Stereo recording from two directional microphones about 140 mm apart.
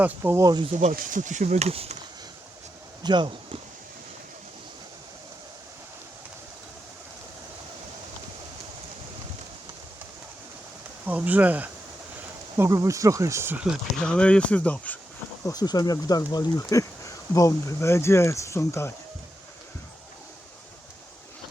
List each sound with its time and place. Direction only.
0.0 s speech: 15° right (ahead or behind)
0.7 s speech: 55° right (ahead or behind)
0.9 s speech: 65° right (ahead or behind); by 2.0 s 50° right (ahead or behind)
3.0 s speech: 35° right (ahead or behind)
11.0 s speech: 10° right (ahead or behind)
12.5 s speech: 20° right (ahead or behind)
13.9 s speech: 5° left (ahead or behind)
15.4 s speech: 30° left (ahead or behind)